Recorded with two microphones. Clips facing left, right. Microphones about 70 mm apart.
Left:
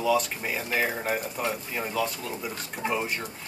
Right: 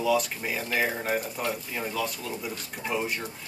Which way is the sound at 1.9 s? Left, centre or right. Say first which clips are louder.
Left 2 dB; centre.